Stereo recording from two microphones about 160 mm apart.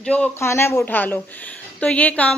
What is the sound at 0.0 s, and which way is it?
Speech, 10° left (ahead or behind).